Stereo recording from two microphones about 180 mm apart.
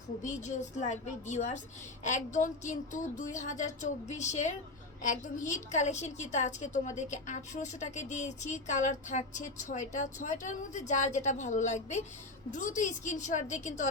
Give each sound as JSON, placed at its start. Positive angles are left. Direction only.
{"t": 0.2, "sound": "a woman's voice", "side_deg": 40}